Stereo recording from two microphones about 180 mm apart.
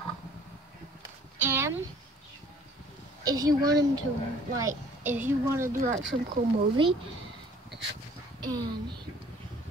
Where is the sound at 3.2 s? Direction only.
20° right (ahead or behind).